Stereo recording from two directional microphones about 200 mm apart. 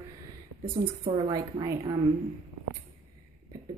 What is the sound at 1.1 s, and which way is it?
Speech, 25° right (ahead or behind).